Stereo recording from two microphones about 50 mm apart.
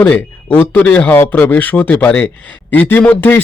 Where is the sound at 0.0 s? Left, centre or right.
Left.